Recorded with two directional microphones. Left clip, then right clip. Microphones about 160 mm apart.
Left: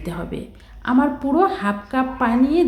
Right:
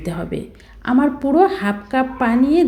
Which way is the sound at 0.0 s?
15° right (ahead or behind).